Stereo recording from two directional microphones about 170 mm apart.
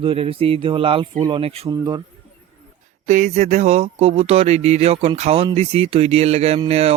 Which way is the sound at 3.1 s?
45° right (ahead or behind).